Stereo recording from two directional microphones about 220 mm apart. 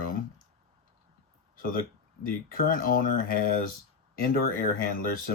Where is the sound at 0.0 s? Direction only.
40° left (ahead or behind).